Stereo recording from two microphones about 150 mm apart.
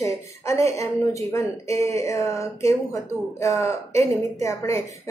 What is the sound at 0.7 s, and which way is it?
Speech, 20° left (ahead or behind).